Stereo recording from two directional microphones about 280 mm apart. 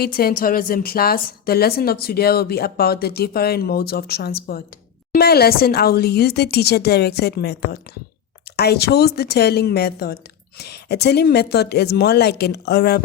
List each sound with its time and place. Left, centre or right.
0.0 s a woman's voice: left